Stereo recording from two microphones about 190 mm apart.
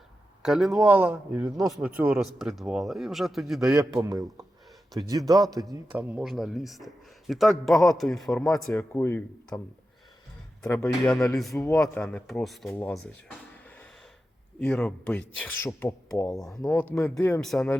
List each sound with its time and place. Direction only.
0.4 s a man's voice: centre (ahead or behind)
0.9 s a man's voice: 10° right (ahead or behind)
3.8 s a man's voice: 20° right (ahead or behind)
5.6 s a man's voice: 5° right (ahead or behind)
8.7 s speech: 10° left (ahead or behind)
10.7 s speech: 15° left (ahead or behind)
11.0 s a man's voice: 5° left (ahead or behind)
14.6 s a man's voice: centre (ahead or behind)
17.4 s a man's voice: centre (ahead or behind)